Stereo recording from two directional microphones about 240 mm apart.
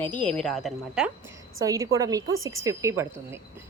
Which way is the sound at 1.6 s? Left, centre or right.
Centre.